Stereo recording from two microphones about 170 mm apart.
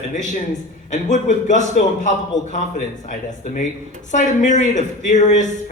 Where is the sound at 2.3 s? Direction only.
90° left.